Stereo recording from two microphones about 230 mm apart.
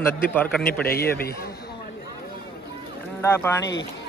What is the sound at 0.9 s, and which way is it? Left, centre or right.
Speech, left.